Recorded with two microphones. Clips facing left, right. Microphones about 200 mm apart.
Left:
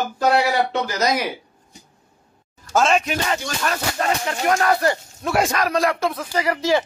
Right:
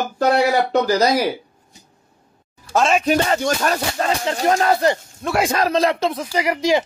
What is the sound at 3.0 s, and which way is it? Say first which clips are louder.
Speech: right 7 dB; 35° right (ahead or behind).